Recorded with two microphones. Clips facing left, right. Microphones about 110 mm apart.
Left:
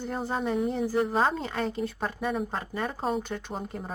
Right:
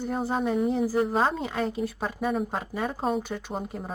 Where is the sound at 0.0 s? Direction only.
5° right (ahead or behind).